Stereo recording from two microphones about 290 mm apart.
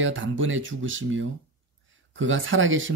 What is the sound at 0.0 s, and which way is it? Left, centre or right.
Speech, right.